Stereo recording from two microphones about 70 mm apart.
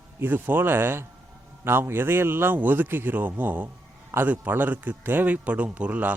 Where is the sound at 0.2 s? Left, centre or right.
Right.